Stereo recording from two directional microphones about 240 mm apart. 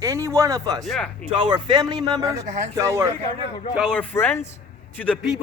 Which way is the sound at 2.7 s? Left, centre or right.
Centre.